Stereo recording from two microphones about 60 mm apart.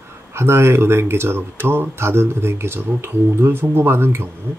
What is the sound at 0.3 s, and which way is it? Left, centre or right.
Speech, right.